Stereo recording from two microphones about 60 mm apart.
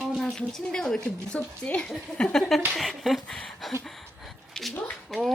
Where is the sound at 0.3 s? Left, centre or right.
Centre.